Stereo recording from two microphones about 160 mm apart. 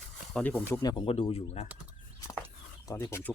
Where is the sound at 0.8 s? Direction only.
30° left (ahead or behind).